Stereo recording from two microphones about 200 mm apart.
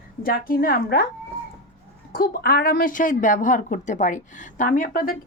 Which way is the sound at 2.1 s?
50° left (ahead or behind).